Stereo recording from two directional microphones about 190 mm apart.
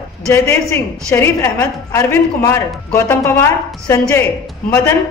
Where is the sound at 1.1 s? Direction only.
15° left (ahead or behind).